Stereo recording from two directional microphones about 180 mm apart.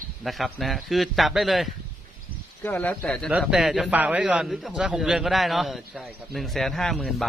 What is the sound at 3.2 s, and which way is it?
A man's voice, centre (ahead or behind).